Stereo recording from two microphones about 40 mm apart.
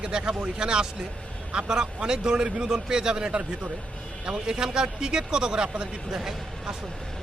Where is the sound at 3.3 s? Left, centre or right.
Right; by 6.3 s centre.